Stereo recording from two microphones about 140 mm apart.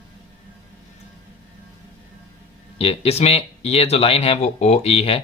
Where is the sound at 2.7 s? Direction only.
45° left (ahead or behind).